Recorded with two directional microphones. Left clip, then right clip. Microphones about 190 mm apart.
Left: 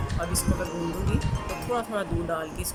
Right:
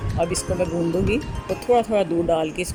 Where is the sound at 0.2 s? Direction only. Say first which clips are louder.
Right 10 dB; 15° right (ahead or behind).